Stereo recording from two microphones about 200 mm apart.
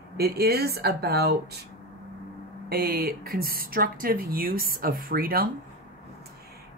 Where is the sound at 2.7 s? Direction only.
50° right (ahead or behind).